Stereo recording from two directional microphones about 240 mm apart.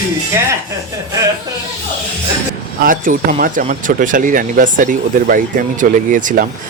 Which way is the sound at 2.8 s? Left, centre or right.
Right.